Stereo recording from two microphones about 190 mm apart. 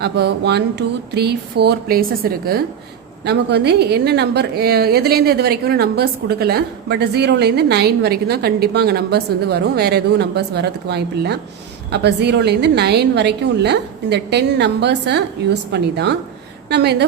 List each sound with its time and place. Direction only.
0.0 s a woman's voice: 60° right (ahead or behind)